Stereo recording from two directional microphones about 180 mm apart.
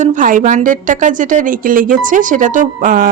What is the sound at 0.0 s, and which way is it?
A woman's voice, 45° right (ahead or behind).